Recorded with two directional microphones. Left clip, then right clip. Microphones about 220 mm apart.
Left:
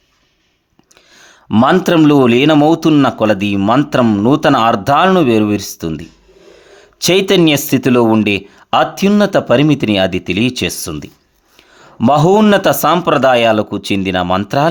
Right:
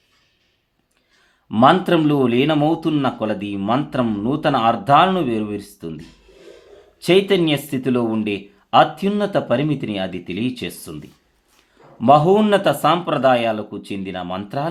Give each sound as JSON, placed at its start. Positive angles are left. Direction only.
{"t": 1.2, "sound": "speech", "side_deg": 45}
{"t": 7.0, "sound": "speech", "side_deg": 45}